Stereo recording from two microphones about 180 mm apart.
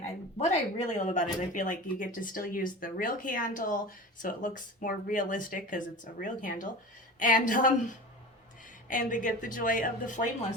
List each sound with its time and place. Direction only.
0.3 s speech: 40° left (ahead or behind)
8.9 s speech: 45° left (ahead or behind)